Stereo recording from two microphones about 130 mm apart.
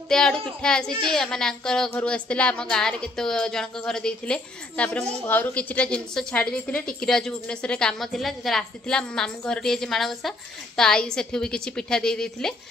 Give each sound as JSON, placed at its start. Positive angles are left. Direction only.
{"t": 0.1, "sound": "a woman's voice", "side_deg": 5}